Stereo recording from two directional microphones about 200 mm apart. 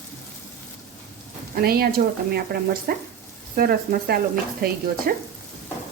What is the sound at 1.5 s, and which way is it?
A woman's voice, 50° right (ahead or behind).